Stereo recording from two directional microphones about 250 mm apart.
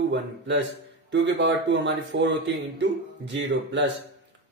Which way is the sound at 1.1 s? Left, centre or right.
Right.